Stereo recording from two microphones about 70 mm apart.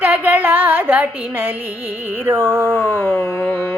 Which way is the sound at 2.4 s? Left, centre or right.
Right.